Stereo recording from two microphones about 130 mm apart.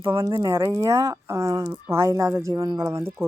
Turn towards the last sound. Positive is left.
turn(degrees=-20)  # may be behind; listen again after turning